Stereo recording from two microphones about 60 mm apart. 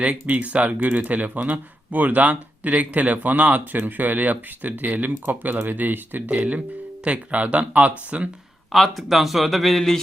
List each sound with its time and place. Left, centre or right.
0.0 s speech: right
8.7 s speech: centre